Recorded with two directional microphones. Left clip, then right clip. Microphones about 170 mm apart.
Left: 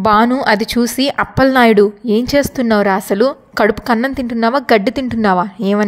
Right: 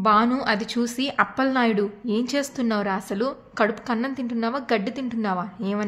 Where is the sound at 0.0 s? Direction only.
45° left (ahead or behind).